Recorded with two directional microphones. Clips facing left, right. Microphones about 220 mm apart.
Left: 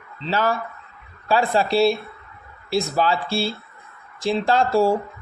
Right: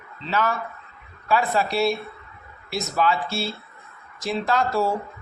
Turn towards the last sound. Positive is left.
turn(degrees=30)  # may be behind; listen again after turning